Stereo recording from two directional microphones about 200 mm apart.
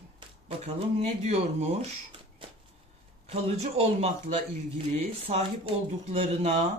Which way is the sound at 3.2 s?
30° right (ahead or behind).